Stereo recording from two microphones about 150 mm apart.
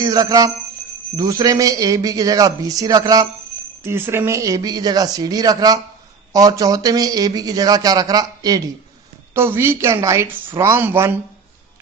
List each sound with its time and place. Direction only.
0.0 s a woman's voice: 25° right (ahead or behind)